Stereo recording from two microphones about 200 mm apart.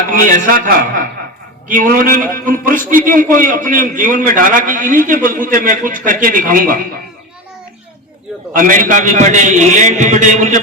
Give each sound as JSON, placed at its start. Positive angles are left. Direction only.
{"t": 0.1, "sound": "a man's voice", "side_deg": -40}
{"t": 8.5, "sound": "a man's voice", "side_deg": -40}